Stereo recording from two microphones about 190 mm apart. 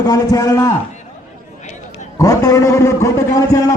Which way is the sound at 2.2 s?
15° left (ahead or behind).